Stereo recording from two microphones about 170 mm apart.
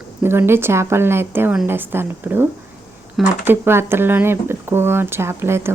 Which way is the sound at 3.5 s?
15° right (ahead or behind).